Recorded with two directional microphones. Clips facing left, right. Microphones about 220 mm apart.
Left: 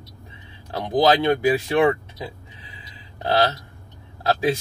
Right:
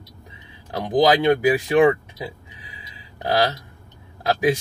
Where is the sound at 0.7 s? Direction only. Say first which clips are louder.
Right 1 dB; 15° right (ahead or behind).